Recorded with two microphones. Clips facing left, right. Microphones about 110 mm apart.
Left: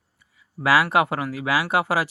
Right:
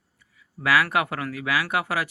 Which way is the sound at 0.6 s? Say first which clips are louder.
Left 3 dB; 30° left (ahead or behind).